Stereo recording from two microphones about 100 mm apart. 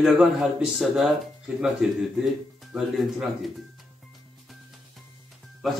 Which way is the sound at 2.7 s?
Centre (ahead or behind).